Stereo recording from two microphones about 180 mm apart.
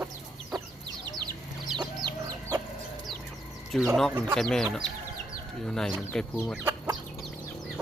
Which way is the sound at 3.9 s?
Centre (ahead or behind).